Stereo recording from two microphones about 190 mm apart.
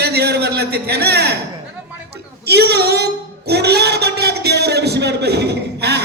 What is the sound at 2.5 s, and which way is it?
Speech, 60° right (ahead or behind).